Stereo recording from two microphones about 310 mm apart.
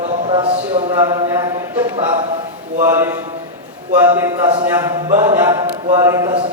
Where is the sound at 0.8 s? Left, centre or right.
Centre.